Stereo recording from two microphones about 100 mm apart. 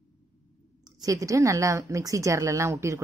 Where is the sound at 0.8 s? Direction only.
35° right (ahead or behind).